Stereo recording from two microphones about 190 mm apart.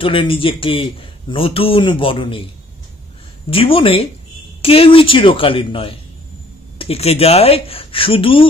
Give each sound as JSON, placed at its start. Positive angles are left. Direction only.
{"t": 0.0, "sound": "a man's voice", "side_deg": 30}